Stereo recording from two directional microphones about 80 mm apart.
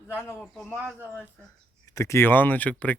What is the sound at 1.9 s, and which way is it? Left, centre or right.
Speech, left.